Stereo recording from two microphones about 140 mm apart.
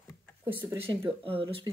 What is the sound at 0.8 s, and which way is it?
Speech, 40° right (ahead or behind).